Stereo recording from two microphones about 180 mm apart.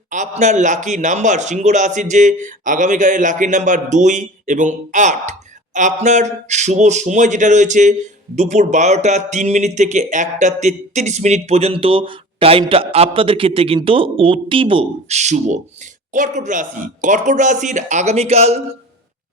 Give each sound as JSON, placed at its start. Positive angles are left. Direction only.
{"t": 0.1, "sound": "a man's voice", "side_deg": -40}